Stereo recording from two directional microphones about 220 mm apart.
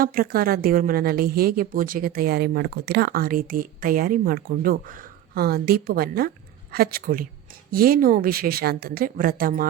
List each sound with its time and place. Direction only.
0.0 s a woman's voice: 40° right (ahead or behind)